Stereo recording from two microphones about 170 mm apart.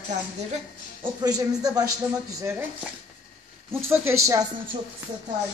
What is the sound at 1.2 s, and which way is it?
Speech, 20° right (ahead or behind).